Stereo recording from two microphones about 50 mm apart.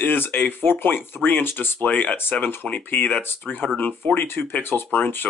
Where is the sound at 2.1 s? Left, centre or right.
Left.